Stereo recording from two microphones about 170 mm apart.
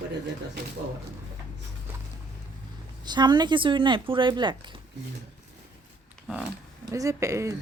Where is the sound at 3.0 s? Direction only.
25° right (ahead or behind).